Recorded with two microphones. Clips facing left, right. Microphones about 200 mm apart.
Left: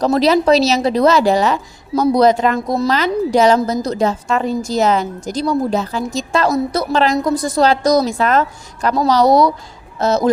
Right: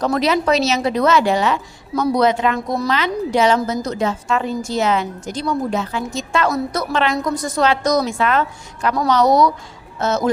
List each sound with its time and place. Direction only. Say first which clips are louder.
0.0 s a woman's voice: left 4 dB; 35° left (ahead or behind)